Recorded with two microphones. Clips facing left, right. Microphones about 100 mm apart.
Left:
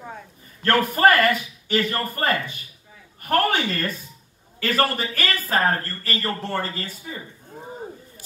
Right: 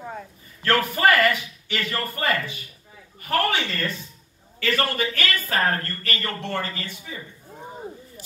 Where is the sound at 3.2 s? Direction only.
45° left (ahead or behind).